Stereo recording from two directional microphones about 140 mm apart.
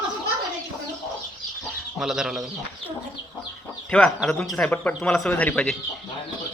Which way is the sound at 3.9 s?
Centre (ahead or behind).